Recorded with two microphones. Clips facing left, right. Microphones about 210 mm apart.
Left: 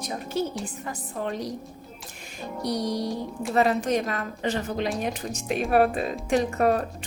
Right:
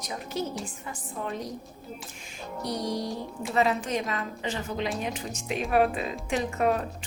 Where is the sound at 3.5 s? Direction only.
45° left (ahead or behind).